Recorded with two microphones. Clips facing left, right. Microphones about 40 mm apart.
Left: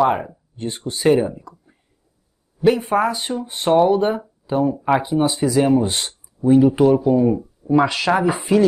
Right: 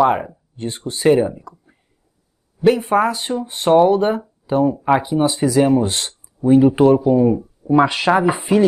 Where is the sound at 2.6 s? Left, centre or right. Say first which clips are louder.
Right 2 dB; centre.